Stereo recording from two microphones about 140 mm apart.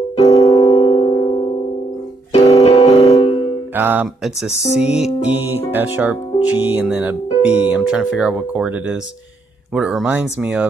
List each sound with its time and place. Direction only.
0.3 s music: 30° left (ahead or behind)
3.7 s speech: 15° right (ahead or behind)
4.2 s speech: centre (ahead or behind)